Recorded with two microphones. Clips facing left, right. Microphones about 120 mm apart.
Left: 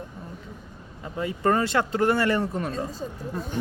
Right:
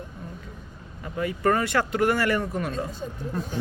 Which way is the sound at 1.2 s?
25° left (ahead or behind).